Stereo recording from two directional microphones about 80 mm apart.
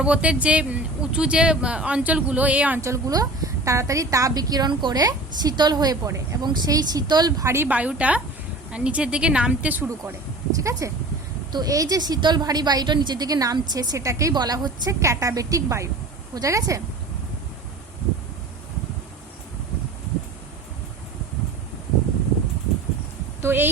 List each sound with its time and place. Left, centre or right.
0.0 s speech: centre
2.8 s a woman's voice: right
4.7 s a woman's voice: right
6.1 s a woman's voice: right
6.7 s a woman's voice: right
7.4 s a woman's voice: right
7.7 s speech: centre
10.5 s a woman's voice: right
14.3 s a woman's voice: right
14.8 s a woman's voice: right
23.4 s a sound: right